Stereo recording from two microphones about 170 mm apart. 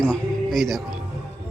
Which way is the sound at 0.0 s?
5° left (ahead or behind).